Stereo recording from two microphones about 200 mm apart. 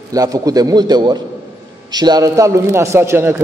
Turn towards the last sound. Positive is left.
turn(degrees=-10)  # may be behind; listen again after turning